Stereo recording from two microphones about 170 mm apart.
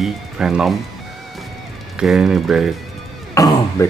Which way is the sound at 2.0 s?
Centre (ahead or behind).